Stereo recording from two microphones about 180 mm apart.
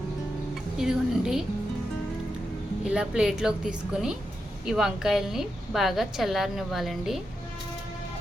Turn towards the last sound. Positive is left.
turn(degrees=0)  # may be behind; listen again after turning